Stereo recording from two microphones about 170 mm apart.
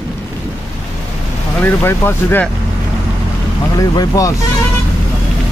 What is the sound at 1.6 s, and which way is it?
Speech, 15° left (ahead or behind).